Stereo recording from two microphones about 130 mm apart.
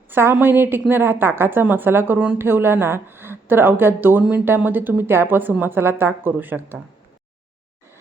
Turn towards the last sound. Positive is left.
turn(degrees=-15)  # may be behind; listen again after turning